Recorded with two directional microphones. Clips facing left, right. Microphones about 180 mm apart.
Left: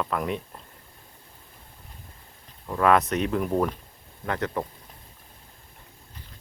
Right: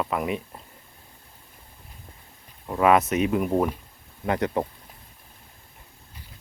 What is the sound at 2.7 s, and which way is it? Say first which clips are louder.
Speech: right 2 dB; 10° right (ahead or behind).